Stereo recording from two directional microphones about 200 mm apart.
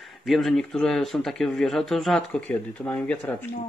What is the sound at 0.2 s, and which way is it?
Speech, centre (ahead or behind).